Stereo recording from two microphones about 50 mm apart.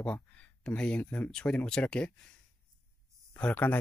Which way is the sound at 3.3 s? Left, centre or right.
Left.